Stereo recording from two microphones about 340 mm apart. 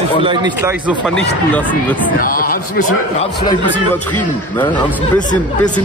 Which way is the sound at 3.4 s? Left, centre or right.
Centre.